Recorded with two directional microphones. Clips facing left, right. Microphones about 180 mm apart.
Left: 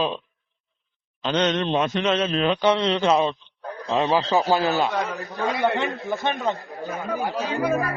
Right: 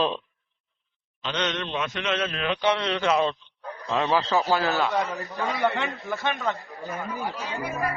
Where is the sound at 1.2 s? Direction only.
40° left (ahead or behind).